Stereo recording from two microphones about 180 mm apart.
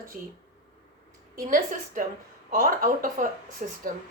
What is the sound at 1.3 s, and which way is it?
A woman's voice, 50° right (ahead or behind).